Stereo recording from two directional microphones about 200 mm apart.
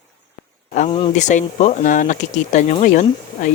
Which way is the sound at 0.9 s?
25° left (ahead or behind).